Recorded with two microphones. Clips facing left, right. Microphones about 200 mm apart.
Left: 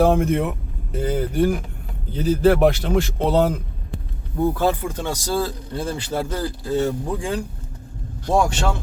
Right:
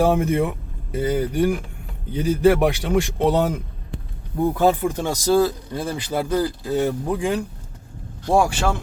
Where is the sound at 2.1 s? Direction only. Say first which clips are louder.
Even; 10° right (ahead or behind).